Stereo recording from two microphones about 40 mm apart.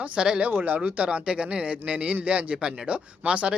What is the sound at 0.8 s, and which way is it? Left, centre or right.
Speech, right.